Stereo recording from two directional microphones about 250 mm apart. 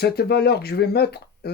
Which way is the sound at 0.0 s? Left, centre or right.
Left.